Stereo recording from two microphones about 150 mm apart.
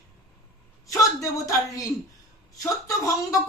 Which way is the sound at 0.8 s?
20° left (ahead or behind).